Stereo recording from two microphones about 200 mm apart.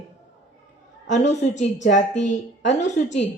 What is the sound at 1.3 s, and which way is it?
A woman's voice, 35° left (ahead or behind).